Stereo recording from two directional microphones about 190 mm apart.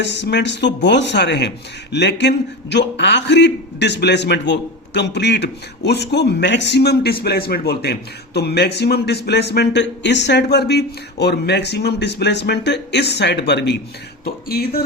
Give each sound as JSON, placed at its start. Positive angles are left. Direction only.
{"t": 0.0, "sound": "speech", "side_deg": 65}